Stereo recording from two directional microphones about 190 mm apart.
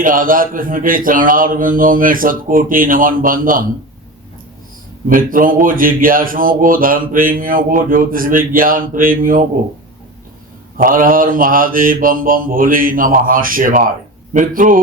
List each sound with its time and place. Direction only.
0.0 s speech: 45° right (ahead or behind)
5.0 s speech: 45° right (ahead or behind)
10.8 s speech: 45° right (ahead or behind)